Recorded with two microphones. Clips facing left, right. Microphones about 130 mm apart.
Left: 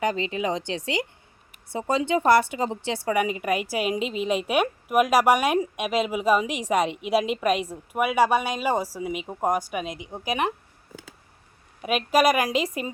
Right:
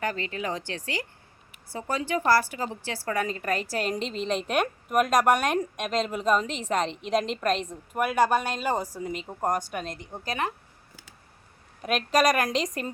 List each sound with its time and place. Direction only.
0.0 s a woman's voice: 20° left (ahead or behind); by 10.2 s 5° left (ahead or behind)
10.2 s a woman's voice: 15° left (ahead or behind)
11.8 s a woman's voice: 5° left (ahead or behind)